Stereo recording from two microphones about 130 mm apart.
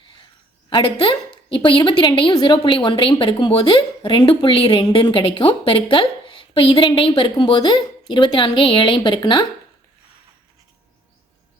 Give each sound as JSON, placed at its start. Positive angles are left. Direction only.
{"t": 0.7, "sound": "a woman's voice", "side_deg": 40}